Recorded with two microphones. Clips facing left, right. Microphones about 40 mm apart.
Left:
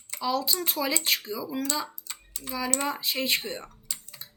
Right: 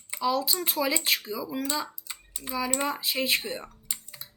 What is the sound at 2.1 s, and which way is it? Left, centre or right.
Typing, centre.